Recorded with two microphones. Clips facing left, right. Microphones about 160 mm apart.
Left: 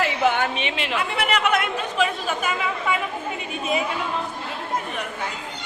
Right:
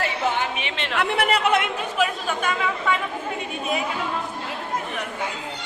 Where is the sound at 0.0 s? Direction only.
70° left (ahead or behind).